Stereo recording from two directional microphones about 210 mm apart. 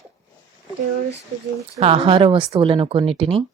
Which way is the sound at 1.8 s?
25° right (ahead or behind).